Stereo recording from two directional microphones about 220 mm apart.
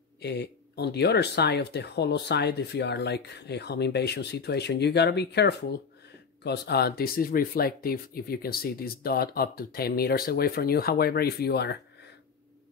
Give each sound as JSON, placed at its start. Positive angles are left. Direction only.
{"t": 0.2, "sound": "speech", "side_deg": 50}